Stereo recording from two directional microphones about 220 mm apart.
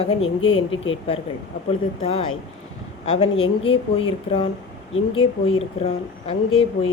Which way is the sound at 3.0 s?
25° left (ahead or behind).